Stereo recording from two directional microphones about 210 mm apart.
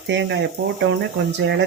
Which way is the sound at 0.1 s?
55° right (ahead or behind).